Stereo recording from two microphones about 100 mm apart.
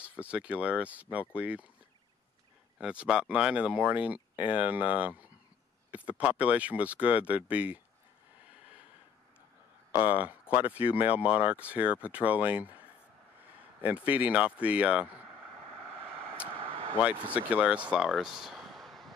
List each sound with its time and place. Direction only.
0.0 s speech: 10° right (ahead or behind)
2.8 s speech: 10° right (ahead or behind)
10.0 s speech: 15° right (ahead or behind)
13.8 s speech: 15° right (ahead or behind)
16.4 s vehicle: 70° right (ahead or behind)
17.4 s speech: 15° right (ahead or behind)